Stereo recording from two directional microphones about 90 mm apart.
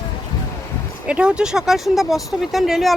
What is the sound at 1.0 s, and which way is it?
Speech, 10° right (ahead or behind).